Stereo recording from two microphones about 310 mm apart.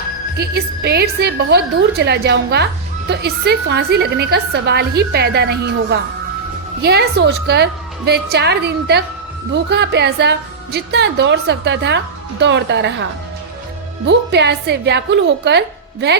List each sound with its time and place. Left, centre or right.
0.3 s a woman's voice: right
14.1 s a woman's voice: right